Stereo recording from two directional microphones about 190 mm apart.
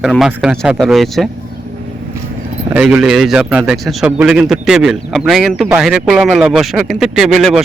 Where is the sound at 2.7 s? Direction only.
5° right (ahead or behind).